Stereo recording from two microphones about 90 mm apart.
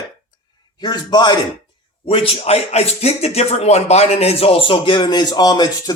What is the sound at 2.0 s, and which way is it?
Speech, 90° left.